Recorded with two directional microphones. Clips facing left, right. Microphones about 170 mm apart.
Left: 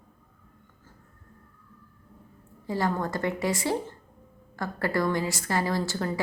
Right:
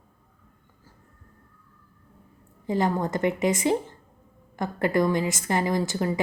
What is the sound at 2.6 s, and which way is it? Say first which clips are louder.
A woman's voice: right 3 dB; 20° right (ahead or behind).